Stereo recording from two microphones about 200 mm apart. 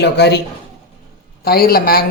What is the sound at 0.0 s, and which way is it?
Speech, 55° left (ahead or behind).